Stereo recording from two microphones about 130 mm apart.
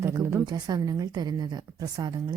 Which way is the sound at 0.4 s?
30° right (ahead or behind).